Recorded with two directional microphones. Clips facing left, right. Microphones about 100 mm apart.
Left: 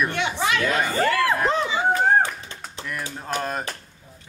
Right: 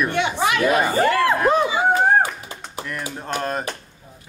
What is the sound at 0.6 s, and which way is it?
Speech, 15° right (ahead or behind).